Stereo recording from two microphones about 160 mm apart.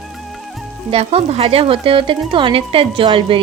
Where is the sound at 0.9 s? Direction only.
40° right (ahead or behind).